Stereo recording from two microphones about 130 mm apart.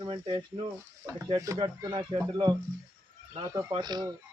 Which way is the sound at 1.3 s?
25° right (ahead or behind).